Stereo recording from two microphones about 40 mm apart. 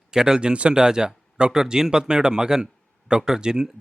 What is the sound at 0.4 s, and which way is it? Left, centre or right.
Speech, right.